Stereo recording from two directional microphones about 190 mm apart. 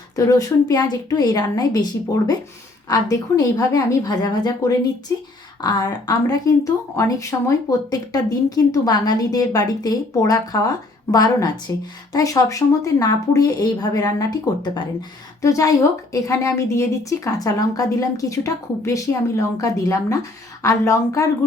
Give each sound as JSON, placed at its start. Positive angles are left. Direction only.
{"t": 0.2, "sound": "a woman's voice", "side_deg": 15}